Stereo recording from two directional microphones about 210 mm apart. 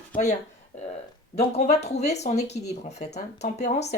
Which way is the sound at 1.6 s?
30° left (ahead or behind).